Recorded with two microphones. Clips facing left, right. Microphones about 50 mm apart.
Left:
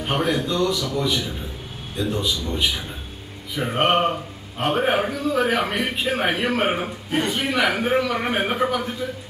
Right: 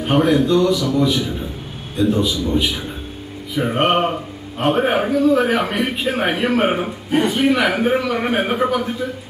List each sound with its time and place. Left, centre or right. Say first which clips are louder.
0.0 s a man's voice: right 7 dB; centre